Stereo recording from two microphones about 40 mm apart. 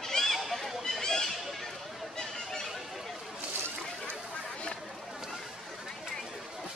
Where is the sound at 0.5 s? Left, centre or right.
Centre.